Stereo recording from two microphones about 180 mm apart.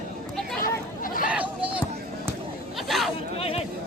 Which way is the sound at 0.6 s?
50° left (ahead or behind).